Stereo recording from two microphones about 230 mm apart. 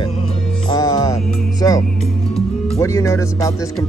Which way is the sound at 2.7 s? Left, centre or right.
Centre.